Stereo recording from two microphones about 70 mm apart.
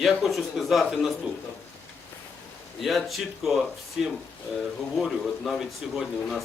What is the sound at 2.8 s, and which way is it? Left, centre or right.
Speech, centre.